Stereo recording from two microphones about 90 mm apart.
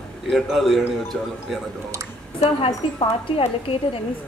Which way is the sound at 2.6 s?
85° left.